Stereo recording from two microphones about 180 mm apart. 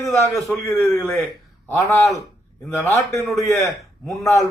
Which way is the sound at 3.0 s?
40° right (ahead or behind).